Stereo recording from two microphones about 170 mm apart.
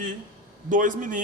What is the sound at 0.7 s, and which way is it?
Speech, 50° right (ahead or behind).